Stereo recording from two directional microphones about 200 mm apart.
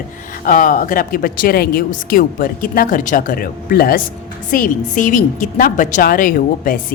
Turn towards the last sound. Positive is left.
turn(degrees=45)  # may be behind; listen again after turning